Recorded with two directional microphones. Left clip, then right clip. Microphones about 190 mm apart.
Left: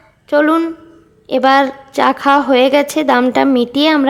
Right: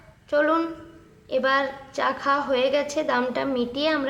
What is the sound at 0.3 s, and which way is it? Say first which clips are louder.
A woman's voice: left 9 dB; 45° left (ahead or behind).